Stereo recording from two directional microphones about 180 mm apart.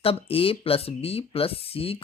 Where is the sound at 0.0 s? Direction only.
30° left (ahead or behind).